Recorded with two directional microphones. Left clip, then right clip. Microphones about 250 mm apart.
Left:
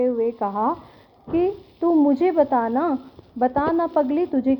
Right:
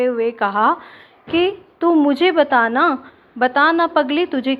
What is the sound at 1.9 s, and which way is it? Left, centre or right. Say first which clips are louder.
A woman's voice: right 4 dB; right.